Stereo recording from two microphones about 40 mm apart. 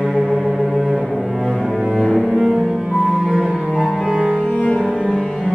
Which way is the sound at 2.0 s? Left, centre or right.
Centre.